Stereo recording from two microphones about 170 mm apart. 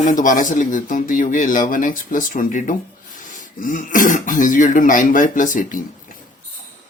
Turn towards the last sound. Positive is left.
turn(degrees=50)  # may be behind; listen again after turning